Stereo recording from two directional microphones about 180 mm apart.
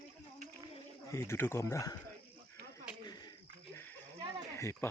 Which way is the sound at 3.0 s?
20° left (ahead or behind).